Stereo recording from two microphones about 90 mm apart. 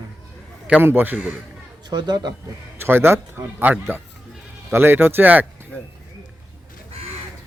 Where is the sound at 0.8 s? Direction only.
25° right (ahead or behind).